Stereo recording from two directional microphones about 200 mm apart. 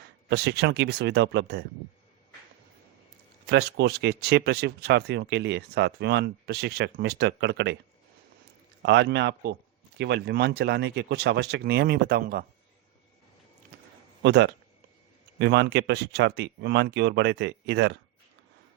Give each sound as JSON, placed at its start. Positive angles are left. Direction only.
{"t": 0.0, "sound": "speech", "side_deg": -55}
{"t": 3.4, "sound": "speech", "side_deg": -55}
{"t": 8.8, "sound": "speech", "side_deg": -60}
{"t": 14.2, "sound": "a man's voice", "side_deg": -60}